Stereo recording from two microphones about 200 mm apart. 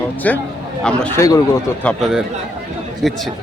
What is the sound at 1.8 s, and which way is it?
A man's voice, centre (ahead or behind).